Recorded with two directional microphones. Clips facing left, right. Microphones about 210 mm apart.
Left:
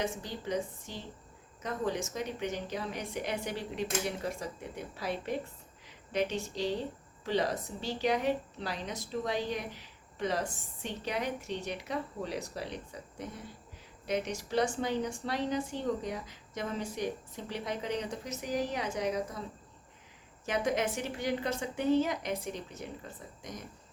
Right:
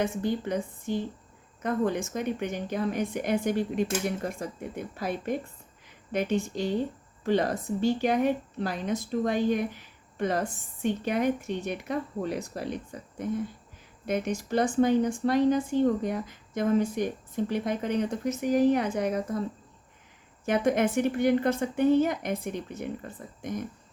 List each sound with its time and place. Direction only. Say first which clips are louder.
0.0 s a woman's voice: right 8 dB; 55° right (ahead or behind)
20.4 s a woman's voice: right 6 dB; 55° right (ahead or behind)